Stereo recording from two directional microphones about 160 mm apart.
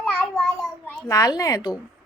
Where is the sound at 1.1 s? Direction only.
20° left (ahead or behind).